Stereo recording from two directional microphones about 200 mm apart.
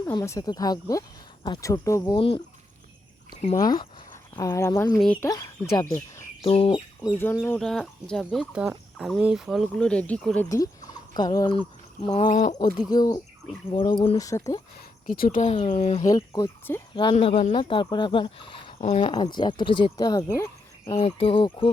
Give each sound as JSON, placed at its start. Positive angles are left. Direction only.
{"t": 0.0, "sound": "speech", "side_deg": 15}
{"t": 2.1, "sound": "speech", "side_deg": 25}
{"t": 3.6, "sound": "speech", "side_deg": 20}
{"t": 4.9, "sound": "speech", "side_deg": 5}
{"t": 5.2, "sound": "speech", "side_deg": 20}
{"t": 6.4, "sound": "bird", "side_deg": 25}
{"t": 7.2, "sound": "speech", "side_deg": 10}
{"t": 10.5, "sound": "speech", "side_deg": 15}
{"t": 12.3, "sound": "speech", "side_deg": 40}
{"t": 12.9, "sound": "speech", "side_deg": 20}
{"t": 14.2, "sound": "speech", "side_deg": 15}
{"t": 15.1, "sound": "speech", "side_deg": 45}
{"t": 16.1, "sound": "speech", "side_deg": 15}
{"t": 21.0, "sound": "speech", "side_deg": 30}